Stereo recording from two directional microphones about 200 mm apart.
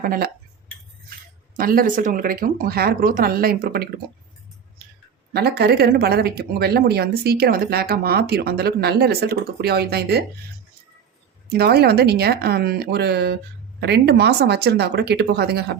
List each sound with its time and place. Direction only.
0.0 s speech: 45° right (ahead or behind)
1.5 s speech: 45° right (ahead or behind)
5.3 s speech: 55° right (ahead or behind)
11.4 s speech: 50° right (ahead or behind)